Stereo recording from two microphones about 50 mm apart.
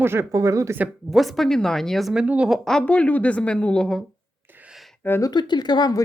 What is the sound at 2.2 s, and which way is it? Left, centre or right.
Speech, right.